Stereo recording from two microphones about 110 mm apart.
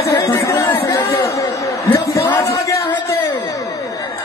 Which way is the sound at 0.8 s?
30° left (ahead or behind).